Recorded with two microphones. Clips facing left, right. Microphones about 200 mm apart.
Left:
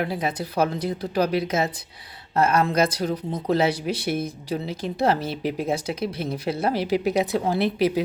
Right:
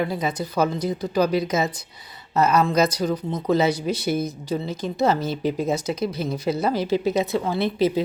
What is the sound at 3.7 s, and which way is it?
Speech, 30° left (ahead or behind).